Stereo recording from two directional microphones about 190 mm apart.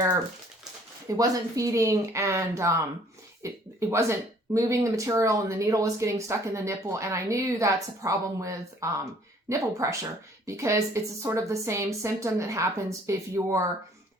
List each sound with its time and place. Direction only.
1.0 s speech: 15° right (ahead or behind)